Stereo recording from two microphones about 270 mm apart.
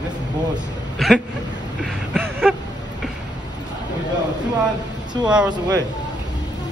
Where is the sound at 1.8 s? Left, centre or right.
Centre.